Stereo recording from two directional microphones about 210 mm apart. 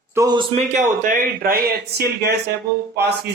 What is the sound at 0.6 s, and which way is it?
A man's voice, 35° right (ahead or behind).